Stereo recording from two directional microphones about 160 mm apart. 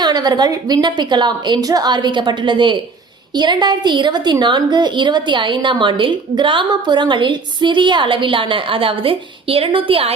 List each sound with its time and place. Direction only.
0.0 s a woman's voice: 25° right (ahead or behind)